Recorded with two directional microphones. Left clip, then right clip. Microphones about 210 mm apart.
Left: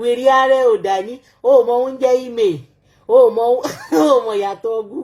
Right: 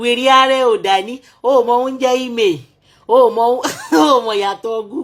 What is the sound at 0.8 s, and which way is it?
Speech, 35° right (ahead or behind).